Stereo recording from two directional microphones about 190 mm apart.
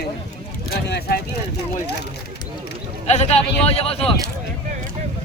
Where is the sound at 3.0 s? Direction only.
35° left (ahead or behind).